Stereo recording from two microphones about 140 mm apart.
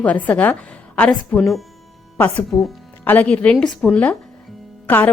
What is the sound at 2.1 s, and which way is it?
Speech, 15° left (ahead or behind).